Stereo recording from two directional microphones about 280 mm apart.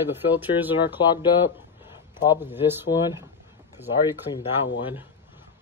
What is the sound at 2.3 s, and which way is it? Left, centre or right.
Speech, centre.